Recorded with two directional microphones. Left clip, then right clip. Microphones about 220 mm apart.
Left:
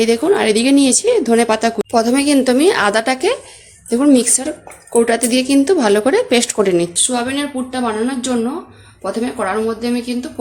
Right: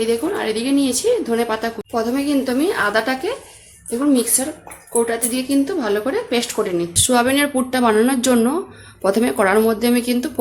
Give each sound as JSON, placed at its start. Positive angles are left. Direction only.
{"t": 0.0, "sound": "speech", "side_deg": 35}
{"t": 6.9, "sound": "a woman's voice", "side_deg": -30}